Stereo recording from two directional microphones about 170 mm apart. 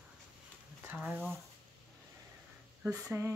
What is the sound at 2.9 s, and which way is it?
Speech, 15° right (ahead or behind).